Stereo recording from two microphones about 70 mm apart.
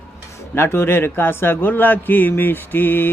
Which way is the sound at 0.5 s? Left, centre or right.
Left.